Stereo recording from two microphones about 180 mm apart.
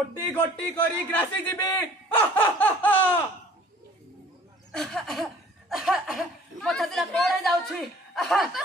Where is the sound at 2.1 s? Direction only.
10° left (ahead or behind).